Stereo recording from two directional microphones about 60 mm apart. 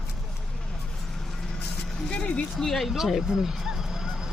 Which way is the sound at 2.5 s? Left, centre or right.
Centre.